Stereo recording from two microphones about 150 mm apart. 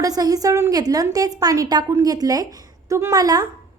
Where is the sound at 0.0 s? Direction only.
25° right (ahead or behind).